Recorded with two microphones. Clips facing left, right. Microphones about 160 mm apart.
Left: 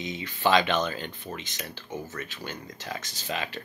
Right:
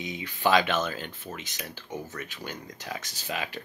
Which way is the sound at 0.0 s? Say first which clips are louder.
Left 1 dB; 10° right (ahead or behind).